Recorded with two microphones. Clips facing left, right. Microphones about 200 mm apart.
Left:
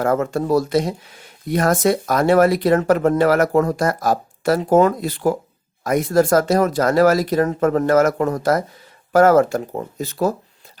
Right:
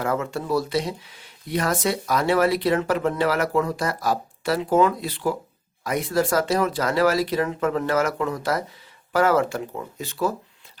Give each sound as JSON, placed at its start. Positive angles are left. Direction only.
{"t": 0.0, "sound": "speech", "side_deg": 45}